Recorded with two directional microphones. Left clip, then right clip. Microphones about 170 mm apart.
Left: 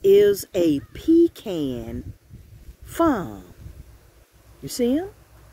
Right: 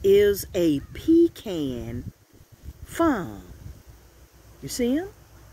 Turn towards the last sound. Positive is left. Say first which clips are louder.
# left 3 dB
turn(degrees=20)  # may be behind; listen again after turning